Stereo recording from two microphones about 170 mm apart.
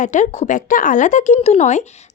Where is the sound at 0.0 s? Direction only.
45° left (ahead or behind).